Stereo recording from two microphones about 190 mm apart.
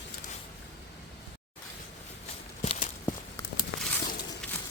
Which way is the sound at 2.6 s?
35° left (ahead or behind).